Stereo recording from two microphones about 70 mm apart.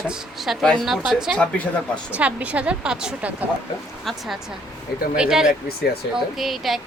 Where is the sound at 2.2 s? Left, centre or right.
Centre.